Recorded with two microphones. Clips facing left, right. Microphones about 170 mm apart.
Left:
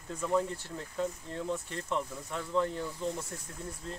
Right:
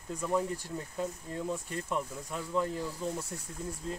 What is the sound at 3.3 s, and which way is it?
Speech, 20° right (ahead or behind).